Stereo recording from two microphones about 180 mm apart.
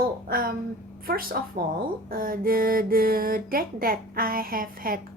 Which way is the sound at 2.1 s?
50° right (ahead or behind).